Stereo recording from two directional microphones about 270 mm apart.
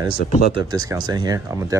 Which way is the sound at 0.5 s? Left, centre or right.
Centre.